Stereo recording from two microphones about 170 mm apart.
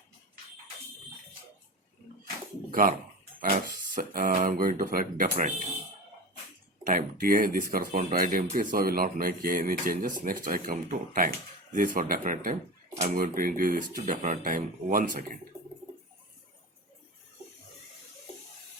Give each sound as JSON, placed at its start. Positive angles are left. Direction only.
{"t": 2.6, "sound": "a sound", "side_deg": -55}
{"t": 3.5, "sound": "speech", "side_deg": -50}
{"t": 6.8, "sound": "speech", "side_deg": -55}